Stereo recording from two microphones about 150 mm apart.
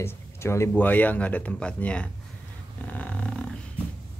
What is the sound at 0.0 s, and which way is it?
Speech, 15° left (ahead or behind).